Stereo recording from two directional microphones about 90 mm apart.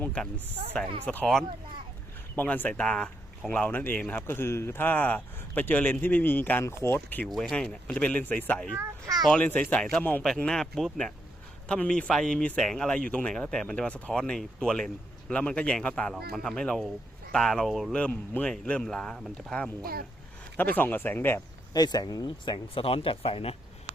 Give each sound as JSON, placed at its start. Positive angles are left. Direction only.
{"t": 0.0, "sound": "speech", "side_deg": 15}
{"t": 2.3, "sound": "speech", "side_deg": 20}
{"t": 7.3, "sound": "speech", "side_deg": 0}
{"t": 17.9, "sound": "speech", "side_deg": 15}
{"t": 21.7, "sound": "speech", "side_deg": 45}
{"t": 22.5, "sound": "speech", "side_deg": 90}